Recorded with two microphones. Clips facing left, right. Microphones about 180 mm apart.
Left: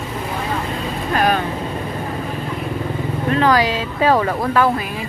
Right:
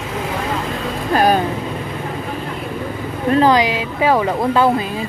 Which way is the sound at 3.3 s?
35° right (ahead or behind).